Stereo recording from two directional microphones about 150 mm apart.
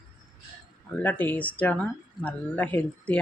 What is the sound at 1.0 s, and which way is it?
Speech, 10° left (ahead or behind).